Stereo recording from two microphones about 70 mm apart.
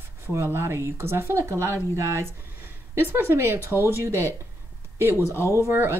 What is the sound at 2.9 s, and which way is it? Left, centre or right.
Speech, right.